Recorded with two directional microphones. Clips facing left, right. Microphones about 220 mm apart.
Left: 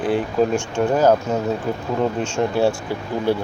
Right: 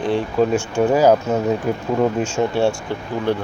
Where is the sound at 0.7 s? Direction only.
10° right (ahead or behind).